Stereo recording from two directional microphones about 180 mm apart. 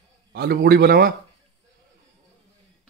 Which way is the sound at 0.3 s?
60° right (ahead or behind).